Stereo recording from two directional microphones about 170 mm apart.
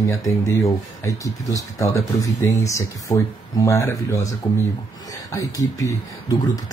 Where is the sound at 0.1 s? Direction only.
20° left (ahead or behind).